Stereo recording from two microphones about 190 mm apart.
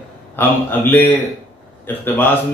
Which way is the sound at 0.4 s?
10° left (ahead or behind).